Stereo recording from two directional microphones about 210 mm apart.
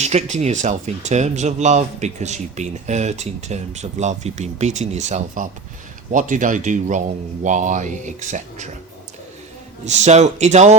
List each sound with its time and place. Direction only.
0.0 s speech: 30° right (ahead or behind)
9.8 s speech: 35° right (ahead or behind)